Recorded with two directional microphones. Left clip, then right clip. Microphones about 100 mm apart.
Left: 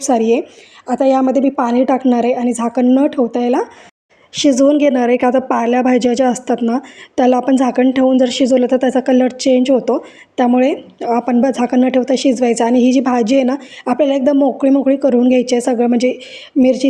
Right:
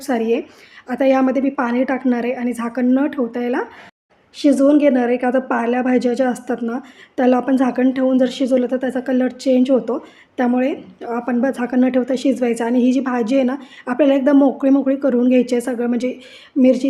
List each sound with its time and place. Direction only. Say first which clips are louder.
0.0 s speech: left 6 dB; 50° left (ahead or behind)
0.9 s a woman's voice: left 3 dB; 40° left (ahead or behind)
4.4 s a woman's voice: left 3 dB; 80° left; by 16.9 s 35° left (ahead or behind)